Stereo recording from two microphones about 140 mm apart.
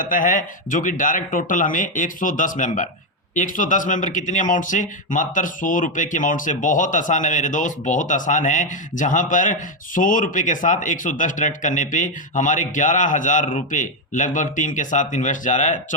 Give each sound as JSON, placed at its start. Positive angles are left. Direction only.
{"t": 0.1, "sound": "speech", "side_deg": 70}